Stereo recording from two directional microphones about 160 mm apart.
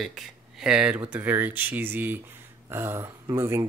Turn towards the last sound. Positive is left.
turn(degrees=-15)  # may be behind; listen again after turning